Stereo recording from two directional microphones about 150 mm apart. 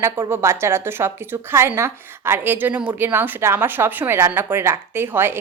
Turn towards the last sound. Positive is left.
turn(degrees=-15)  # may be behind; listen again after turning